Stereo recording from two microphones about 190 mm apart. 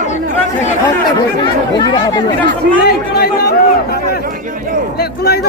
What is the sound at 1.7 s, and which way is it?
Speech, 25° left (ahead or behind).